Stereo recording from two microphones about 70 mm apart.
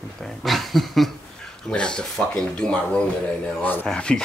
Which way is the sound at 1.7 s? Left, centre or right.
Centre.